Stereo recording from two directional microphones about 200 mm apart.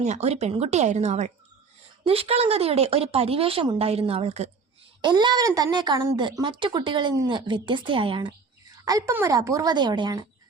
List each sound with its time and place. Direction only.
0.0 s speech: 35° right (ahead or behind)